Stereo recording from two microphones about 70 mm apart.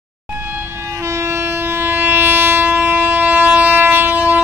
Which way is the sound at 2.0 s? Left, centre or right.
Right.